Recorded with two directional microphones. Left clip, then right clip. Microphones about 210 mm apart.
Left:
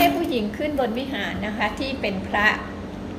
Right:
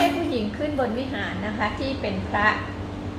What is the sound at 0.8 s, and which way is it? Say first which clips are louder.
A woman's voice: left 1 dB; 50° left (ahead or behind).